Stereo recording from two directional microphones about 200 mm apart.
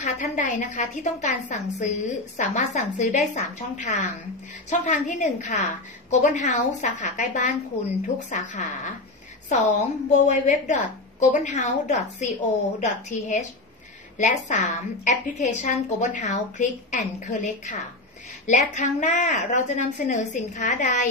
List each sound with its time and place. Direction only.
0.0 s a woman's voice: 35° left (ahead or behind)